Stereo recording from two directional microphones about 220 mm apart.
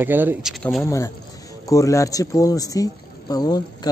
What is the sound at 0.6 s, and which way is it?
Speech, 10° left (ahead or behind).